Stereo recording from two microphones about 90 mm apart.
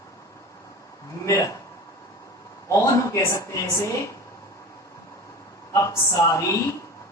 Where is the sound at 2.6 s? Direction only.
35° left (ahead or behind).